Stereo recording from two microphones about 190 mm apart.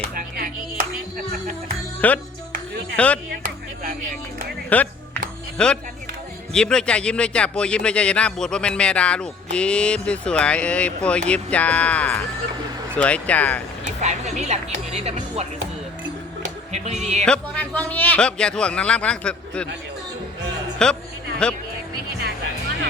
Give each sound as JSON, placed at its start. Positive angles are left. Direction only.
{"t": 0.1, "sound": "speech", "side_deg": -50}
{"t": 2.0, "sound": "speech", "side_deg": 10}
{"t": 4.7, "sound": "music", "side_deg": 10}
{"t": 5.5, "sound": "a man's voice", "side_deg": 5}
{"t": 14.0, "sound": "speech", "side_deg": -35}
{"t": 16.7, "sound": "music", "side_deg": -35}
{"t": 17.2, "sound": "a man's voice", "side_deg": 5}
{"t": 20.8, "sound": "a man's voice", "side_deg": 5}